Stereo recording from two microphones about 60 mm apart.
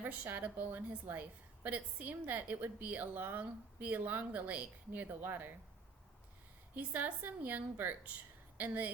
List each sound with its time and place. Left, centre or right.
0.0 s a woman's voice: right
6.7 s a woman's voice: right